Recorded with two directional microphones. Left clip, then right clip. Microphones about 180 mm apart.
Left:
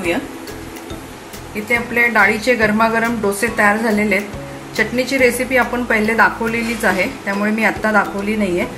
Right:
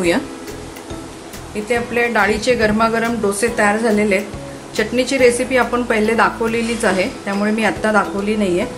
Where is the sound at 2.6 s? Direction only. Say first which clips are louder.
Left 1 dB; 15° right (ahead or behind).